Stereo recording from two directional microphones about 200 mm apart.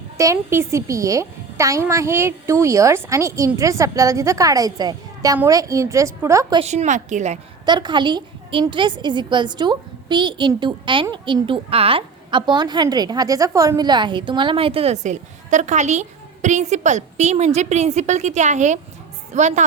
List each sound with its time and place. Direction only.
0.2 s a woman's voice: 15° right (ahead or behind)
6.6 s a woman's voice: 35° right (ahead or behind)
7.6 s a woman's voice: 20° right (ahead or behind)